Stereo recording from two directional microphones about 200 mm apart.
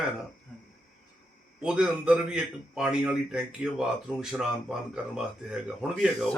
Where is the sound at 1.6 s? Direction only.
5° right (ahead or behind).